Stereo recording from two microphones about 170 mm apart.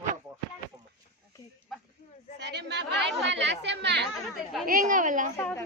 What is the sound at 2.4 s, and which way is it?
Speech, 85° right.